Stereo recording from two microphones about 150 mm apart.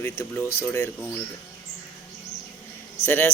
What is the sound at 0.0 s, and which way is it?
Speech, 15° left (ahead or behind).